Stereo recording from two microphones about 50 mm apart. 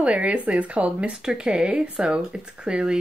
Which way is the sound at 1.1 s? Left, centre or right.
Centre.